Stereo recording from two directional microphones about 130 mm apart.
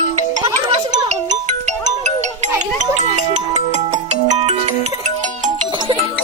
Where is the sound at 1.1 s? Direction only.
65° right (ahead or behind).